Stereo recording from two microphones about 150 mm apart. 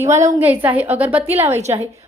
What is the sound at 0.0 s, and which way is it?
A woman's voice, 20° right (ahead or behind).